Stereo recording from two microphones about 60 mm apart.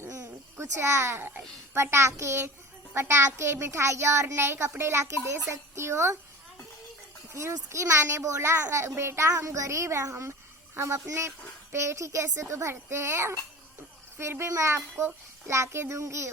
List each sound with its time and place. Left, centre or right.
0.5 s a child's voice: right
7.7 s a child's voice: right